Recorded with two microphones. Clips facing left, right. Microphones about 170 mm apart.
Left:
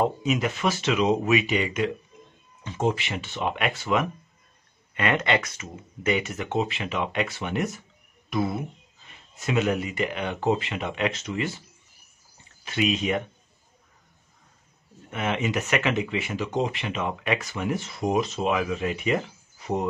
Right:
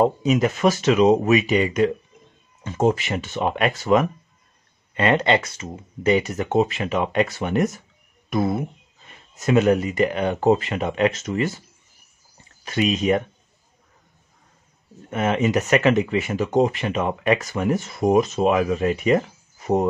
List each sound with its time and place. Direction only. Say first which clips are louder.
0.0 s speech: right 6 dB; 40° right (ahead or behind)
12.6 s speech: right 5 dB; 40° right (ahead or behind)
15.0 s speech: right 6 dB; 40° right (ahead or behind)